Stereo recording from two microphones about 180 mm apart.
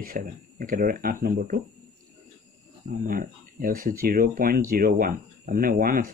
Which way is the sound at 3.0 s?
50° right (ahead or behind).